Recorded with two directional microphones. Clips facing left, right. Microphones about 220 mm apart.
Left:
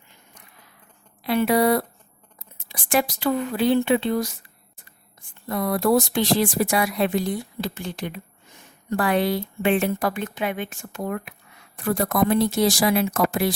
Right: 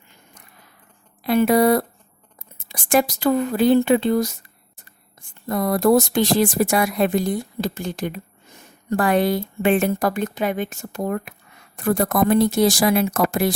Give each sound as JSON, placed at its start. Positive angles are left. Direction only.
{"t": 1.2, "sound": "speech", "side_deg": -45}
{"t": 5.5, "sound": "a woman's voice", "side_deg": -45}